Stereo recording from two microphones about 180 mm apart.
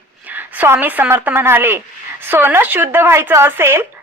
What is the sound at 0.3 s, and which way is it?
A woman's voice, 10° right (ahead or behind).